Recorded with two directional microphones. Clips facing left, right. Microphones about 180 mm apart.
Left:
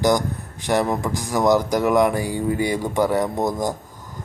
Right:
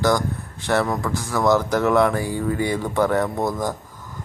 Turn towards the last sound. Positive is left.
turn(degrees=15)  # may be behind; listen again after turning